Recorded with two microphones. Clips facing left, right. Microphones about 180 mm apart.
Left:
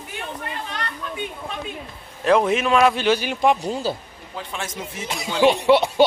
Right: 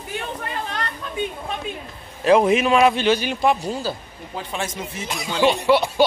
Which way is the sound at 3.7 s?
25° left (ahead or behind).